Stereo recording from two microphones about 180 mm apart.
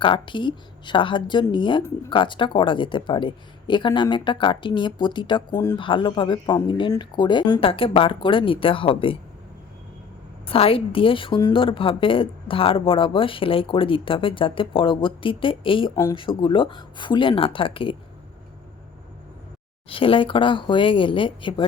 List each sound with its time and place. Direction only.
0.0 s a woman's voice: 25° left (ahead or behind)
10.4 s a woman's voice: 30° left (ahead or behind)
19.9 s a woman's voice: 30° left (ahead or behind)